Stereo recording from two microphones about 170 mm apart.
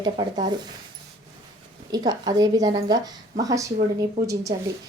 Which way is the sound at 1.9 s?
20° right (ahead or behind).